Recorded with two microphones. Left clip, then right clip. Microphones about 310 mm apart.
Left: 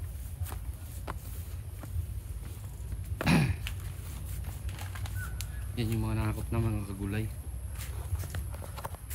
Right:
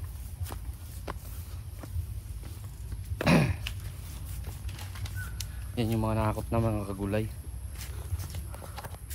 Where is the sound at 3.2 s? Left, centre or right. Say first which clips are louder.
Right 4 dB; centre.